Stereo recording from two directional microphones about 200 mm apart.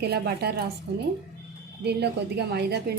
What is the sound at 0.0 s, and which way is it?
Speech, 50° right (ahead or behind).